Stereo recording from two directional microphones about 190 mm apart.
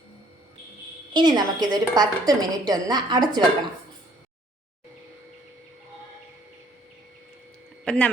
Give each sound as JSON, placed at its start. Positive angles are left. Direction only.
{"t": 1.1, "sound": "a woman's voice", "side_deg": -20}
{"t": 7.9, "sound": "speech", "side_deg": 5}